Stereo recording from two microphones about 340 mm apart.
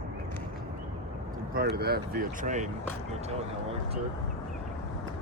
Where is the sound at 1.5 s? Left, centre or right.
Right.